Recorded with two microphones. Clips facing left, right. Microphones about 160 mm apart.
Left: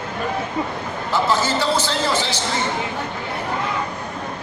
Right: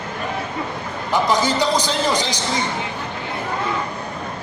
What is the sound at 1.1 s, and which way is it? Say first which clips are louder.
A man's voice: right 2 dB; 15° right (ahead or behind).